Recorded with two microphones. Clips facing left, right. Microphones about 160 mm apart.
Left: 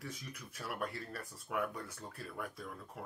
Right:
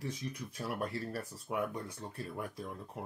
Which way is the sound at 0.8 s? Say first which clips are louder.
Right 3 dB; 30° right (ahead or behind).